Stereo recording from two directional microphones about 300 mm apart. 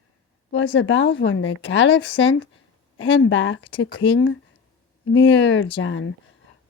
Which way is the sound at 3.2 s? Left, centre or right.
Left.